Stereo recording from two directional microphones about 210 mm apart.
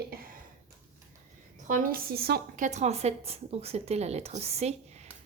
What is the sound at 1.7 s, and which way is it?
Speech, 45° right (ahead or behind).